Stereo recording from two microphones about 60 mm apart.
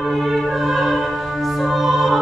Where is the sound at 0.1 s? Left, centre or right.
Centre.